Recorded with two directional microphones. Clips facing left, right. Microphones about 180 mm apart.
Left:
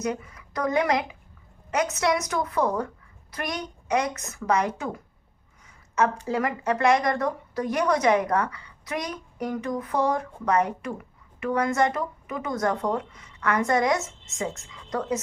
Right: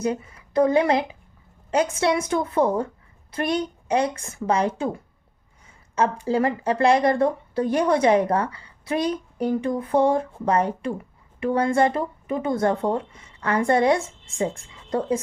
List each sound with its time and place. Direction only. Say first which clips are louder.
0.0 s a woman's voice: right 4 dB; 30° right (ahead or behind)
6.2 s a woman's voice: right 4 dB; 30° right (ahead or behind)